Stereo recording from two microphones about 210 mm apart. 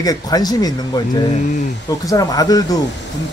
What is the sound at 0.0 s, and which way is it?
Speech, 20° left (ahead or behind).